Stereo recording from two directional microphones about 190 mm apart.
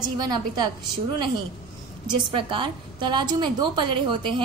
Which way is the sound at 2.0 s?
25° right (ahead or behind).